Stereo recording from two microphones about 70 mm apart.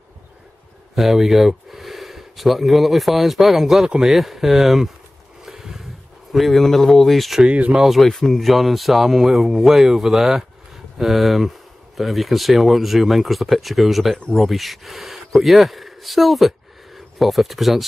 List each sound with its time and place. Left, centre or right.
0.9 s speech: centre
5.4 s a sound: centre
6.3 s speech: centre
7.4 s speech: centre
7.7 s a man's voice: centre